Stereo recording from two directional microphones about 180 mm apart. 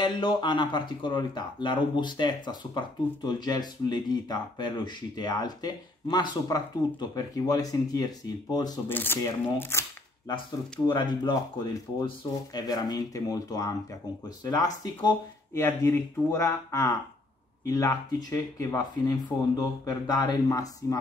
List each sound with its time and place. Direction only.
0.0 s speech: 25° left (ahead or behind)
11.0 s speech: 25° left (ahead or behind)